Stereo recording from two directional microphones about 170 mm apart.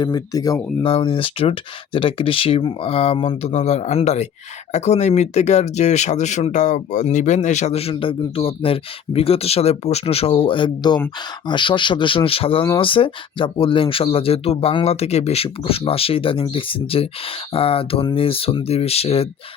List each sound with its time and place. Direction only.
0.0 s speech: 20° left (ahead or behind)
0.9 s speech: 30° left (ahead or behind)